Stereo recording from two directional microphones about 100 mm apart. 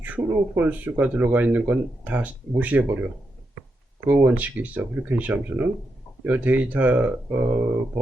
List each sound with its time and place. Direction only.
0.0 s speech: 20° right (ahead or behind)
4.1 s speech: 15° right (ahead or behind)